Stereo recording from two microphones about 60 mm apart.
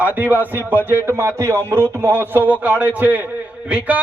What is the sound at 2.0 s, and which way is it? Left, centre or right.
A man's voice, right.